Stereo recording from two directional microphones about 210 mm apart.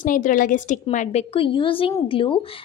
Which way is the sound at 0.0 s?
40° left (ahead or behind).